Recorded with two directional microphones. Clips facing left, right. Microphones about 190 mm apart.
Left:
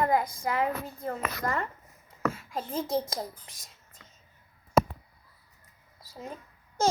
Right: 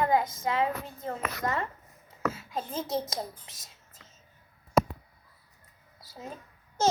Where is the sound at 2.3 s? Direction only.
25° right (ahead or behind).